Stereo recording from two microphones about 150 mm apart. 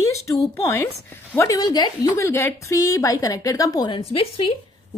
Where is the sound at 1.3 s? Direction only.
20° left (ahead or behind).